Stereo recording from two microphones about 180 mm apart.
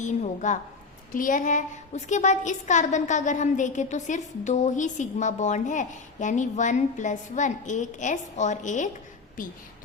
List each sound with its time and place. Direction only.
0.0 s a woman's voice: 40° left (ahead or behind)